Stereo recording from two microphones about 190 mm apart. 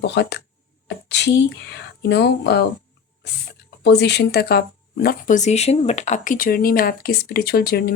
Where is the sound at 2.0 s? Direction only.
65° left (ahead or behind).